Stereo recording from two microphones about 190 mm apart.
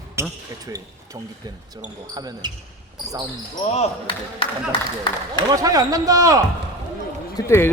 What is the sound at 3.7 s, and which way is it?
Speech, 30° left (ahead or behind).